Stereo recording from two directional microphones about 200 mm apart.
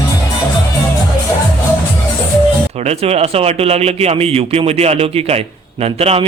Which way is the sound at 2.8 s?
30° right (ahead or behind).